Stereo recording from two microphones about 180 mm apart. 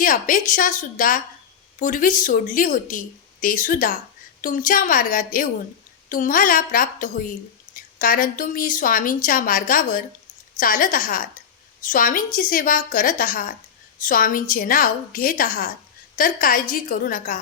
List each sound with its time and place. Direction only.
0.0 s a woman's voice: 50° left (ahead or behind)